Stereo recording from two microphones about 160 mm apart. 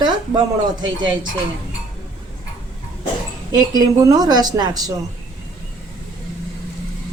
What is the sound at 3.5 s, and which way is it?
A woman's voice, 25° right (ahead or behind).